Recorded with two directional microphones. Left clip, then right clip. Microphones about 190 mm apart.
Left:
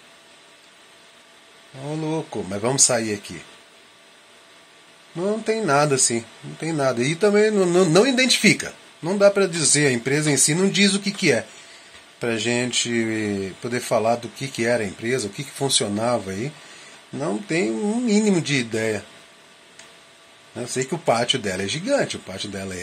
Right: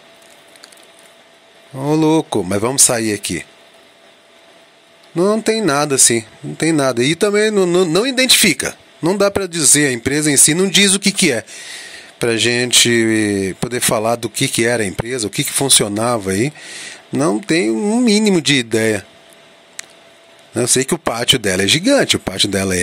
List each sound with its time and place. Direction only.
1.9 s speech: 55° right (ahead or behind)
5.1 s speech: 50° right (ahead or behind)
20.5 s speech: 60° right (ahead or behind)